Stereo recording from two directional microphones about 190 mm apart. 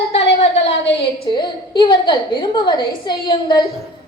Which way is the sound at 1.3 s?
25° left (ahead or behind).